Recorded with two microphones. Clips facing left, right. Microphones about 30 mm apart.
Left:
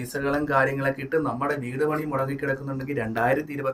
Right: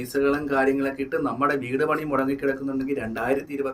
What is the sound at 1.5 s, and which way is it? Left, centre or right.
Speech, right.